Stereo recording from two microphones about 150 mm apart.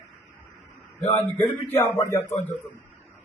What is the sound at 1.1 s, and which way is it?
Speech, 10° left (ahead or behind).